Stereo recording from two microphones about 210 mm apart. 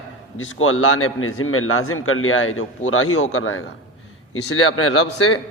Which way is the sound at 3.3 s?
75° left (ahead or behind).